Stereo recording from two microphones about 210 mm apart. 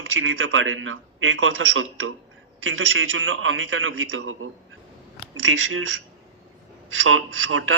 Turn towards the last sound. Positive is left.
turn(degrees=-70)  # may be behind; listen again after turning